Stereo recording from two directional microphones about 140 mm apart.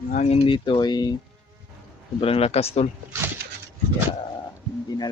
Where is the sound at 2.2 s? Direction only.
45° left (ahead or behind).